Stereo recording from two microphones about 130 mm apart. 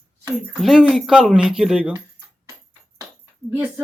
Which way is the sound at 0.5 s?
5° right (ahead or behind).